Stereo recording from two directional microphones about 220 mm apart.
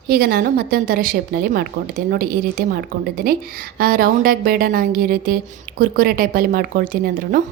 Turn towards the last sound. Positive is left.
turn(degrees=-40)  # may be behind; listen again after turning